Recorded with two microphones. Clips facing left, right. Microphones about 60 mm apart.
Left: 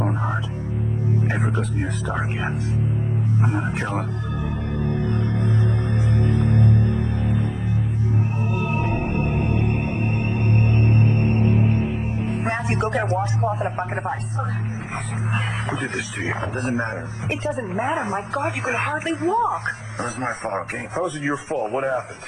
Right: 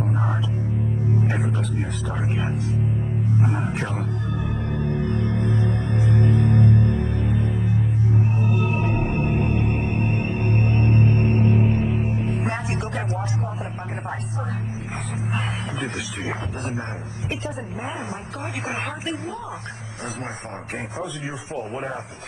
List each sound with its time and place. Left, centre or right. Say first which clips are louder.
0.1 s hum: even; centre
1.4 s speech: left 2 dB; left
3.4 s speech: left 1 dB; centre
12.7 s speech: left 6 dB; left
13.0 s speech: left 6 dB; left
13.4 s speech: left 7 dB; left
15.3 s speech: left 4 dB; left